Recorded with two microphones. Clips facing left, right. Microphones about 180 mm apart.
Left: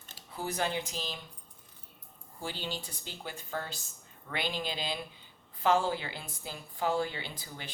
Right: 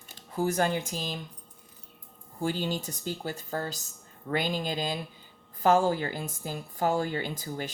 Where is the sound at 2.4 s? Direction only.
45° right (ahead or behind).